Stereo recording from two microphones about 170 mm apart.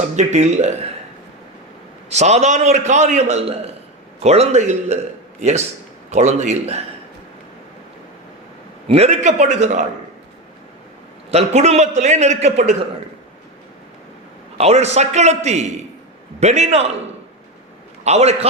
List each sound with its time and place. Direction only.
0.2 s speech: 40° right (ahead or behind)
2.0 s a man's voice: 40° right (ahead or behind)
8.9 s a man's voice: 40° right (ahead or behind)
11.3 s a man's voice: 40° right (ahead or behind)
14.6 s a man's voice: 40° right (ahead or behind)
18.0 s a man's voice: 40° right (ahead or behind)